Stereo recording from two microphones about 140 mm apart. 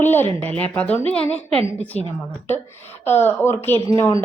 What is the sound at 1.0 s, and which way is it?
Speech, 10° left (ahead or behind).